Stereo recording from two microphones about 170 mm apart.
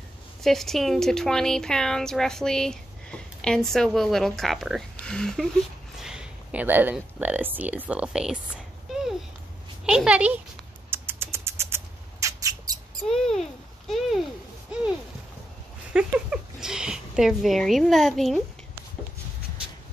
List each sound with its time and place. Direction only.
0.4 s speech: centre (ahead or behind)
10.9 s rodents: 15° right (ahead or behind)
13.1 s babbling: centre (ahead or behind)
15.9 s speech: 5° right (ahead or behind)